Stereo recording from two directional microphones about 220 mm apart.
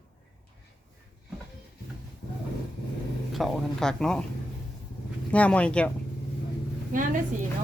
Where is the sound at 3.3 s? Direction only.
Centre (ahead or behind).